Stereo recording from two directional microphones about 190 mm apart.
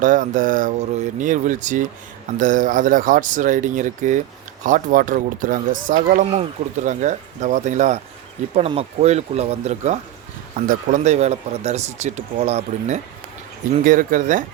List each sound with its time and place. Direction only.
0.0 s speech: 45° right (ahead or behind)